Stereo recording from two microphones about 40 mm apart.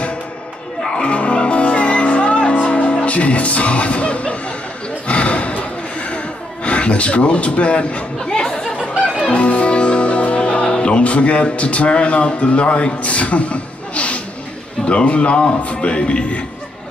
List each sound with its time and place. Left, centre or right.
0.9 s music: left
5.0 s gasp: left
8.3 s chatter: centre
9.3 s music: left
14.9 s a man's voice: left